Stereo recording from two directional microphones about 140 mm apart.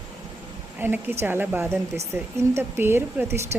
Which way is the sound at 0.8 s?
15° right (ahead or behind).